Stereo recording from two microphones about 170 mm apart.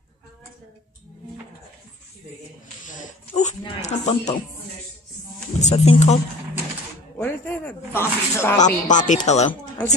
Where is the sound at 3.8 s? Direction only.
40° left (ahead or behind).